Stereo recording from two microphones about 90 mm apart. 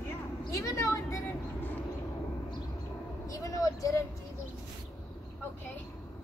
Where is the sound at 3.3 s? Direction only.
35° left (ahead or behind).